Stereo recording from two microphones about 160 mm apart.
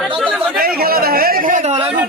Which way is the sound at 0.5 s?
70° right (ahead or behind).